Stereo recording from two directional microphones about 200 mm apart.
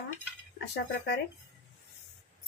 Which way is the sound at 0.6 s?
55° left (ahead or behind).